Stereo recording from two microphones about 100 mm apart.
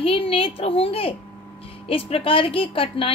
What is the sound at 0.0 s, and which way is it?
A woman's voice, 65° left (ahead or behind).